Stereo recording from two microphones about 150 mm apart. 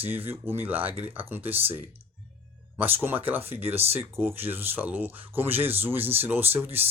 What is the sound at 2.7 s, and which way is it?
Speech, 15° right (ahead or behind).